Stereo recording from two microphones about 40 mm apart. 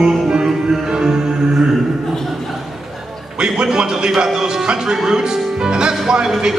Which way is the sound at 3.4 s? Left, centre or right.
Centre.